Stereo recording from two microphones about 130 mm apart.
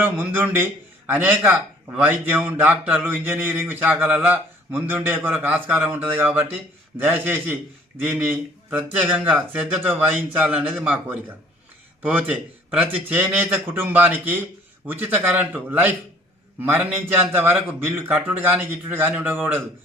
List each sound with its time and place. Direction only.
0.0 s a man's voice: 15° right (ahead or behind)